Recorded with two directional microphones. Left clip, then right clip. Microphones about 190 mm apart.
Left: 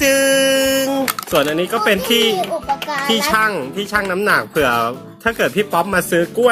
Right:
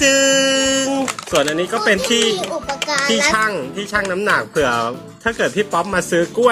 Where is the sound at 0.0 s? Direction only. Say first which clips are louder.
Even; 5° left (ahead or behind).